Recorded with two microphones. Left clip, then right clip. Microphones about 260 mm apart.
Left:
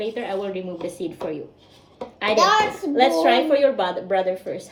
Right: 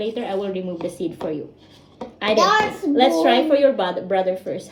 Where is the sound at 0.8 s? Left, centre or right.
Left.